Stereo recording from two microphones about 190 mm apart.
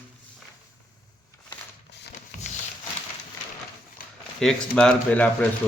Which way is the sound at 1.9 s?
65° left (ahead or behind).